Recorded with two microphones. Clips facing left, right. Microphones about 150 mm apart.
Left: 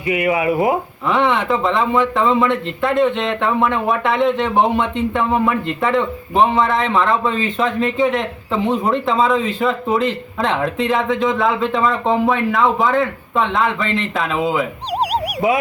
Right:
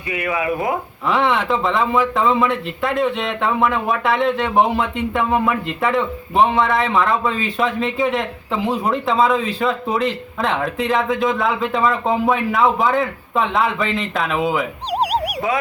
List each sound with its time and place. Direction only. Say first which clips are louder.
0.1 s speech: left 5 dB; 20° left (ahead or behind)
1.0 s a man's voice: left 1 dB; centre (ahead or behind)